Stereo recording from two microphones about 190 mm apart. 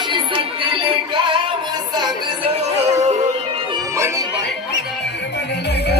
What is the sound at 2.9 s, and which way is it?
Music, 35° right (ahead or behind).